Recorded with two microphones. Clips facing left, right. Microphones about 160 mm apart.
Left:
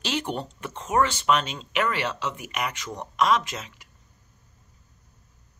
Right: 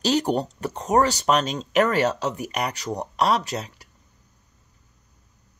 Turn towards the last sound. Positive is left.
turn(degrees=-35)  # may be behind; listen again after turning